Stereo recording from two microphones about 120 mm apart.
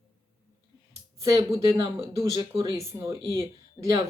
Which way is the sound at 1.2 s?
25° right (ahead or behind).